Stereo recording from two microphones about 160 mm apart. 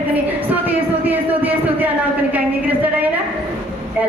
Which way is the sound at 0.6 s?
10° right (ahead or behind).